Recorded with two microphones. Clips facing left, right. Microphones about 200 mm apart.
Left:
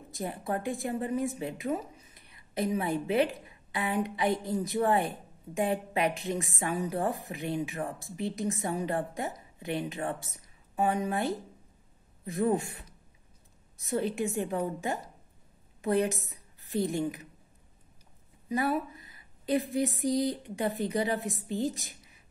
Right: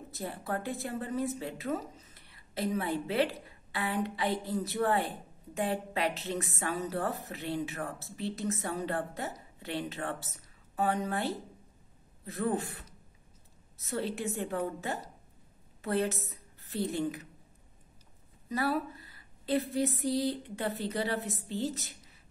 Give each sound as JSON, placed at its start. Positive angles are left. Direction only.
{"t": 0.1, "sound": "a woman's voice", "side_deg": 15}
{"t": 15.8, "sound": "a woman's voice", "side_deg": 15}
{"t": 18.5, "sound": "a woman's voice", "side_deg": 15}